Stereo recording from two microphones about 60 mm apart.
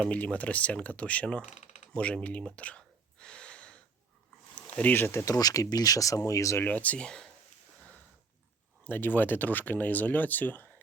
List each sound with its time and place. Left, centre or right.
0.0 s speech: left
2.4 s gasp: centre
4.5 s speech: left
5.2 s speech: left
6.6 s speech: left
8.8 s speech: left